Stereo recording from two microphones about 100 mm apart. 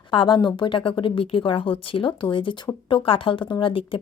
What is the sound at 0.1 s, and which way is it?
A woman's voice, 55° left (ahead or behind).